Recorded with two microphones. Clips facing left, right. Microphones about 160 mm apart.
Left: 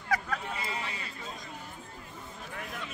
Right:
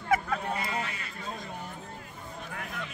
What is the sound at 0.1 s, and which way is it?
Vehicle, 25° right (ahead or behind).